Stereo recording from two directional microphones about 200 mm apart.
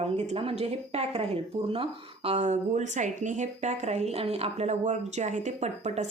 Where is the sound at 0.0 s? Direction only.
30° right (ahead or behind).